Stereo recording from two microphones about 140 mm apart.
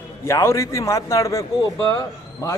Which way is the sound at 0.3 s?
20° left (ahead or behind).